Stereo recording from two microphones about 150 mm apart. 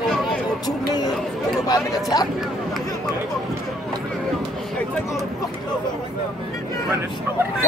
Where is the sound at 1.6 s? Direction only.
25° left (ahead or behind).